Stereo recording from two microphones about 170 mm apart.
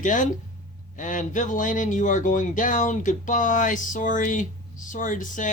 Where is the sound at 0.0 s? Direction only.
50° left (ahead or behind).